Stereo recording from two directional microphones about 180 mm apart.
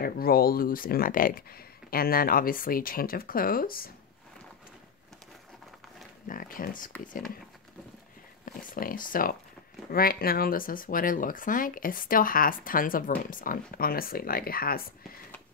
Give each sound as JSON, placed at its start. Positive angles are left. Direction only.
{"t": 0.0, "sound": "speech", "side_deg": 55}
{"t": 6.2, "sound": "speech", "side_deg": 50}
{"t": 8.6, "sound": "speech", "side_deg": 50}